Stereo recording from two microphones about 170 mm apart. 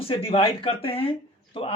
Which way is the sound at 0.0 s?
35° left (ahead or behind).